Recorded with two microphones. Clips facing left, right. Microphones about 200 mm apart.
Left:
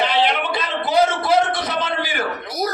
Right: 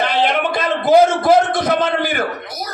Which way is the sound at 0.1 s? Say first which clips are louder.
Right 2 dB; 50° right (ahead or behind).